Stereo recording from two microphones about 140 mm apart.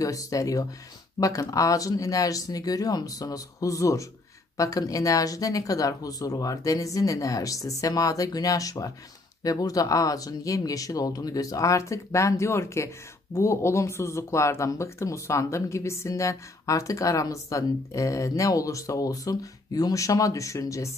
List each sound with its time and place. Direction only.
0.0 s speech: 25° left (ahead or behind)